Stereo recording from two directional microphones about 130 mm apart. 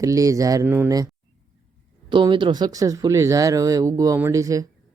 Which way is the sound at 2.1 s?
40° right (ahead or behind).